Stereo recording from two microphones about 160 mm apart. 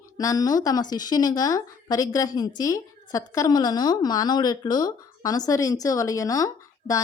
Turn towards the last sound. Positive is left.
turn(degrees=20)  # may be behind; listen again after turning